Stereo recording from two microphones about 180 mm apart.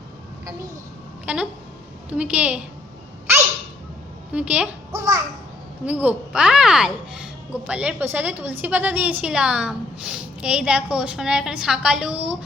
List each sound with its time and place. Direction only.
1.2 s a woman's voice: 5° right (ahead or behind)
4.3 s a woman's voice: 5° right (ahead or behind)
4.9 s a child's voice: 20° right (ahead or behind)
5.8 s speech: 10° right (ahead or behind)